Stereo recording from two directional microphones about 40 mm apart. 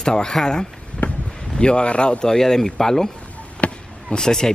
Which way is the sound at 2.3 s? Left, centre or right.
Centre.